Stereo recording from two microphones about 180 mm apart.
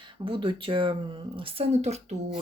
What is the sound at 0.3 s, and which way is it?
Speech, 30° right (ahead or behind).